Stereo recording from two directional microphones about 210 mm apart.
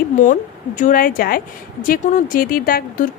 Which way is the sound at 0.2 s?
35° left (ahead or behind).